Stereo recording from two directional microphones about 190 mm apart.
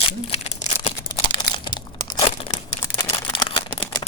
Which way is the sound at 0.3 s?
35° left (ahead or behind).